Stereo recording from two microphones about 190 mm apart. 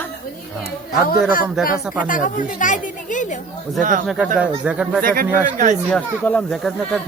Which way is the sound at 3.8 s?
40° right (ahead or behind).